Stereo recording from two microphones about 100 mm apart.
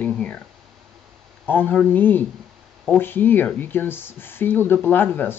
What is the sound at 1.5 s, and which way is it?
Speech, 20° left (ahead or behind).